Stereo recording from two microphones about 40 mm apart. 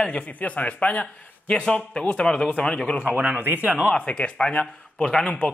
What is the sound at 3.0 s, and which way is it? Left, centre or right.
Speech, right.